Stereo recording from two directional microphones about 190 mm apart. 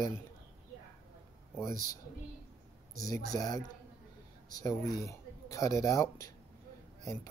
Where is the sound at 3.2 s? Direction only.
20° left (ahead or behind).